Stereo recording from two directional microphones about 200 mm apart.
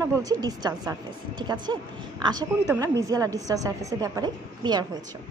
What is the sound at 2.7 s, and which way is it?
A woman's voice, 15° right (ahead or behind).